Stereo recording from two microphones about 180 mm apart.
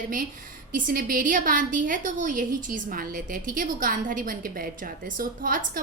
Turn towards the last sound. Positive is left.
turn(degrees=-50)  # may be behind; listen again after turning